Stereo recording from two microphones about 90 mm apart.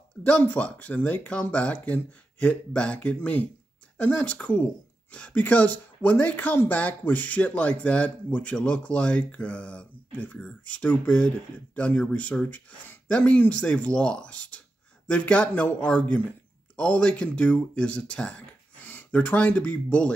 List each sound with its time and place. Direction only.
0.2 s speech: 15° left (ahead or behind)